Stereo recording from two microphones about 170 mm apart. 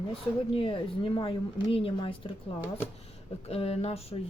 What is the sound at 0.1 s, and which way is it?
Speech, 30° left (ahead or behind).